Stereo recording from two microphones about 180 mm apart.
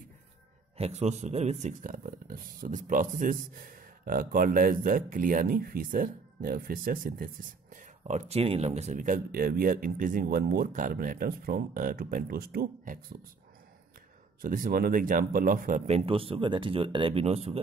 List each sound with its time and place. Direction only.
0.7 s speech: 35° right (ahead or behind); by 13.0 s 50° right (ahead or behind)
14.4 s speech: 50° right (ahead or behind)
16.1 s speech: 30° right (ahead or behind)